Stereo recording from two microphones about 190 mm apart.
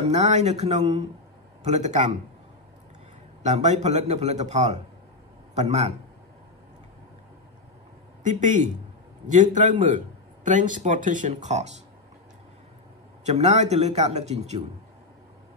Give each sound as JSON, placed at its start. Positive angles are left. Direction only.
{"t": 0.1, "sound": "speech", "side_deg": -35}
{"t": 3.4, "sound": "a man's voice", "side_deg": -35}
{"t": 8.2, "sound": "a man's voice", "side_deg": -40}
{"t": 13.2, "sound": "speech", "side_deg": -35}